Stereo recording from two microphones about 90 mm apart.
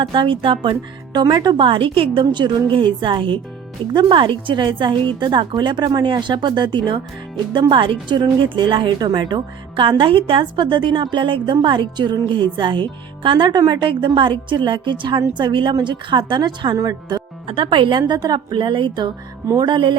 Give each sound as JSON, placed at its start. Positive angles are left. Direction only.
{"t": 0.0, "sound": "a woman's voice", "side_deg": -60}
{"t": 1.6, "sound": "a woman's voice", "side_deg": -75}
{"t": 16.7, "sound": "speech", "side_deg": -45}
{"t": 17.4, "sound": "a woman's voice", "side_deg": -75}